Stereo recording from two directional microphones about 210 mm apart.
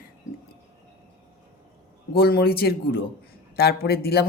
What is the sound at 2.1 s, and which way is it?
Speech, 50° left (ahead or behind).